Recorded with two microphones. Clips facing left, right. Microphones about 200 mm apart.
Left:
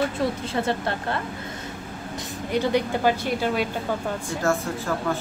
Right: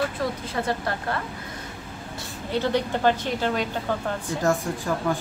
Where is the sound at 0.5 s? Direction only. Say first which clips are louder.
Left 2 dB; 25° left (ahead or behind).